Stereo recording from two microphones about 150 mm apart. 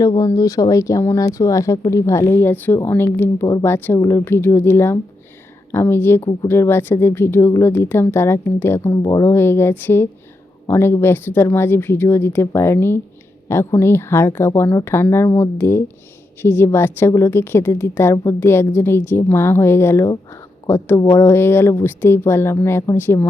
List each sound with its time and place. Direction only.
0.0 s speech: 25° left (ahead or behind)